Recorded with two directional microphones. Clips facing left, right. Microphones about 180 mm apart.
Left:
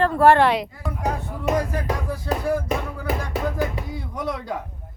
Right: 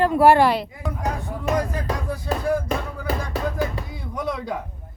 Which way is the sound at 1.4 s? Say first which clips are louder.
Left 1 dB; 15° left (ahead or behind).